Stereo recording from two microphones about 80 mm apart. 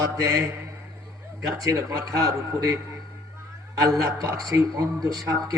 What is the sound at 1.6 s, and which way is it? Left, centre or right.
A man's voice, right.